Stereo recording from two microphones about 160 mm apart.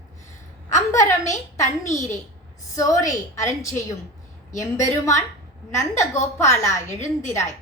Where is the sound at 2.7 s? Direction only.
20° left (ahead or behind).